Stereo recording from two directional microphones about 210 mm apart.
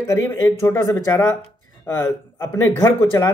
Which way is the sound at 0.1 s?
15° left (ahead or behind).